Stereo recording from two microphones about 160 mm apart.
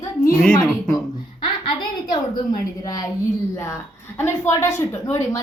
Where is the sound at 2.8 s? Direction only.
20° left (ahead or behind).